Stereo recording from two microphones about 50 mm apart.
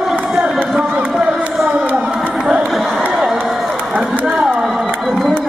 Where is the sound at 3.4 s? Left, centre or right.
Centre.